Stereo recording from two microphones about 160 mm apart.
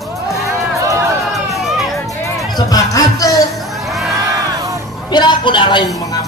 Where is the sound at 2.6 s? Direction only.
20° left (ahead or behind).